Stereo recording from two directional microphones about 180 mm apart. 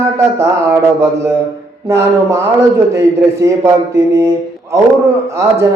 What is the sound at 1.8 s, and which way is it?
Speech, 15° right (ahead or behind).